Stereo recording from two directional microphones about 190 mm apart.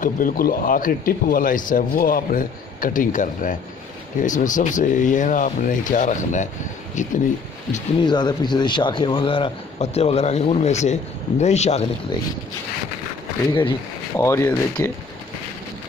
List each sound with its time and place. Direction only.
0.0 s a man's voice: 45° left (ahead or behind)
8.0 s a man's voice: 25° left (ahead or behind)
13.5 s speech: 25° left (ahead or behind)